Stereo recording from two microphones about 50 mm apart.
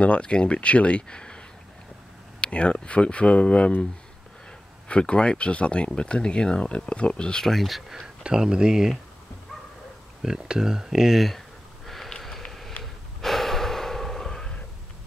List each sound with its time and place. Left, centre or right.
0.0 s speech: left
2.4 s speech: left
4.8 s speech: left
7.4 s speech: centre
8.2 s speech: centre
10.2 s speech: centre
11.2 s a sound: centre
12.8 s gasp: centre